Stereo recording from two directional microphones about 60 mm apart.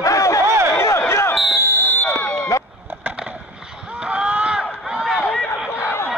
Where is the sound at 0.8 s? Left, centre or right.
Left.